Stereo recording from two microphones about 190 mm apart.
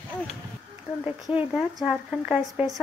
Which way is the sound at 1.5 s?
Centre (ahead or behind).